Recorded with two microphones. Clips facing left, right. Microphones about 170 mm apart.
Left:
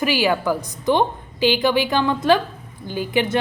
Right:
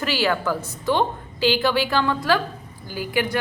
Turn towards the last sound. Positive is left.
turn(degrees=20)  # may be behind; listen again after turning